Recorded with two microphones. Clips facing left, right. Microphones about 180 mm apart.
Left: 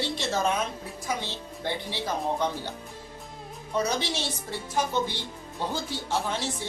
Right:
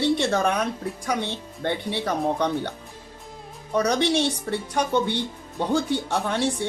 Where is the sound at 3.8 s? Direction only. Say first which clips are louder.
Right 7 dB; 70° right (ahead or behind).